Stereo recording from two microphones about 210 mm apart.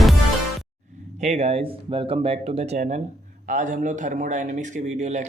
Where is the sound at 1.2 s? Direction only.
30° right (ahead or behind).